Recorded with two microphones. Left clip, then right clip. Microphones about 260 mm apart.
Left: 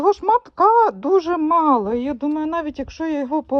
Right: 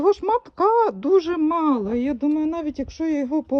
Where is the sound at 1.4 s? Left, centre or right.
Left.